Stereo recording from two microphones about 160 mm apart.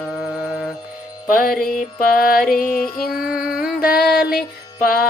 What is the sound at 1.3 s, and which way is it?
Music, 60° left (ahead or behind).